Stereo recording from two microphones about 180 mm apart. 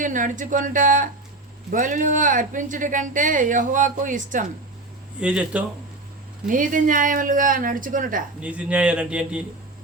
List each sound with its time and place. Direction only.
0.0 s speech: 45° right (ahead or behind)
5.2 s speech: 5° right (ahead or behind)
6.5 s speech: 50° right (ahead or behind)
8.4 s speech: 5° right (ahead or behind)